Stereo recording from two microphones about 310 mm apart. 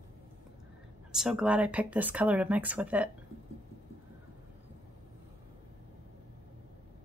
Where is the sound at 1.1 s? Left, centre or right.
Centre.